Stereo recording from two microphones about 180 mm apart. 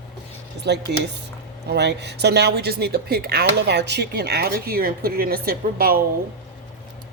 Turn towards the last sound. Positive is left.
turn(degrees=-55)  # may be behind; listen again after turning